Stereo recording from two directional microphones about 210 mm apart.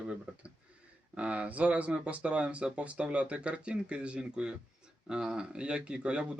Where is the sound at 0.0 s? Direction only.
5° right (ahead or behind).